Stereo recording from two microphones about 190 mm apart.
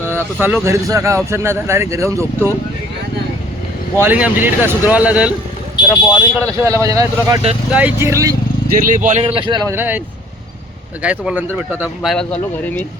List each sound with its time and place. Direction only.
0.1 s speech: 10° right (ahead or behind)
4.0 s speech: 10° right (ahead or behind)
7.7 s speech: 5° right (ahead or behind)
8.7 s speech: 45° right (ahead or behind)
9.2 s speech: 25° right (ahead or behind)
9.7 s speech: 10° right (ahead or behind)
11.0 s speech: 5° right (ahead or behind)